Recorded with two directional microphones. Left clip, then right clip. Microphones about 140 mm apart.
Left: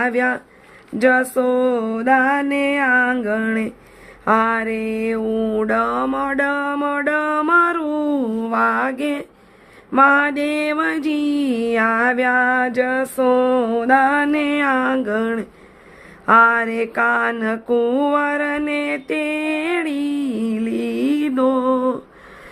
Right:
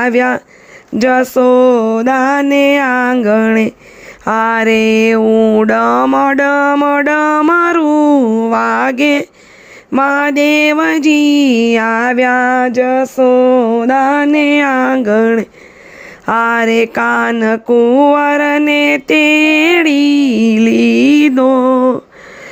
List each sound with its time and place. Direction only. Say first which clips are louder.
0.0 s mantra: right 7 dB; 65° right (ahead or behind)
4.2 s a sound: right 5 dB; 75° right (ahead or behind)
5.2 s speech: right 11 dB; 55° right (ahead or behind)
5.6 s a sound: right 8 dB; 85° right
6.1 s a sound: right 9 dB; 70° right (ahead or behind); by 8.5 s 50° right (ahead or behind)
8.5 s mantra: right 3 dB; 70° right (ahead or behind)
9.9 s mantra: right 2 dB; 55° right (ahead or behind)
16.2 s mantra: right 1 dB; 70° right (ahead or behind)
17.7 s mantra: right 9 dB; 45° right (ahead or behind)